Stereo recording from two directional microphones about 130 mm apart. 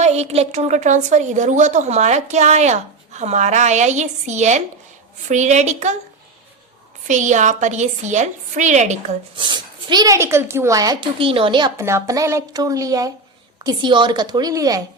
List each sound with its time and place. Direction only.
0.0 s a woman's voice: 55° right (ahead or behind)
7.1 s a woman's voice: 70° right (ahead or behind)
9.3 s speech: 40° right (ahead or behind)
11.0 s speech: 45° right (ahead or behind)
11.8 s a woman's voice: 20° right (ahead or behind)